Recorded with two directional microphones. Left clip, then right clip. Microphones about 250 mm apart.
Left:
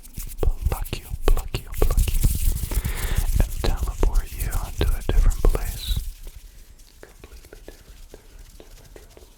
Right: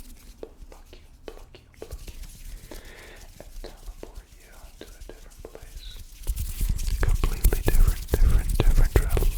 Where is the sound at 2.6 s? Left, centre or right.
Left.